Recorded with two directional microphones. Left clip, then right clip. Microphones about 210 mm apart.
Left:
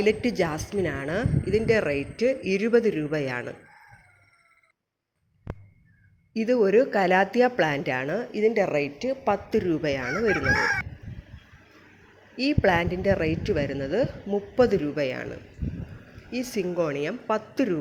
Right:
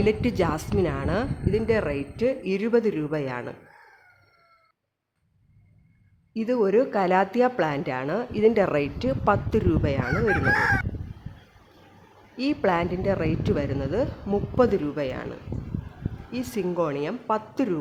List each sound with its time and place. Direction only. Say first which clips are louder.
0.0 s speech: even; 5° right (ahead or behind)
6.3 s speech: left 1 dB; centre (ahead or behind)
10.4 s speech: right 1 dB; 25° right (ahead or behind)
12.4 s speech: left 1 dB; 5° right (ahead or behind)
16.5 s speech: right 1 dB; 5° right (ahead or behind)